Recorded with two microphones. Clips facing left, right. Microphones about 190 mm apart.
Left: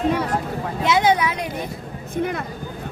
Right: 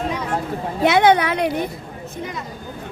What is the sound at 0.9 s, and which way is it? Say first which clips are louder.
Speech: right 4 dB; 60° right (ahead or behind).